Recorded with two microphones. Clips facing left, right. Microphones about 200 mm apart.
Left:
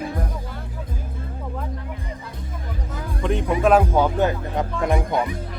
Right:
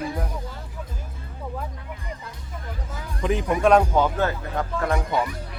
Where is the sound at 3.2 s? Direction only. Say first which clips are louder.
Left 1 dB; centre (ahead or behind); by 5.0 s 20° left (ahead or behind).